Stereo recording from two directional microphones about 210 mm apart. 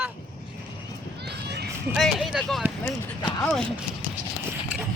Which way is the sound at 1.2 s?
50° right (ahead or behind).